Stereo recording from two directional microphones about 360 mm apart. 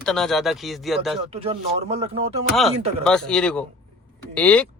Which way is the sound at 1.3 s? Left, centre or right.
Centre.